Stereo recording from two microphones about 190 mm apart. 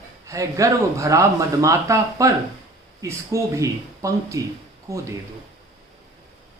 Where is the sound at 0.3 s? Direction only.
15° right (ahead or behind).